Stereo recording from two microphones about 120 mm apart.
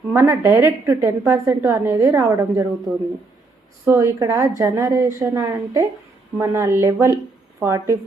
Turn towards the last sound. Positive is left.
turn(degrees=-20)  # may be behind; listen again after turning